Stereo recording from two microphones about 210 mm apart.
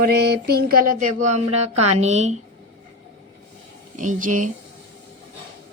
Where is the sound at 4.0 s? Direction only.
40° right (ahead or behind).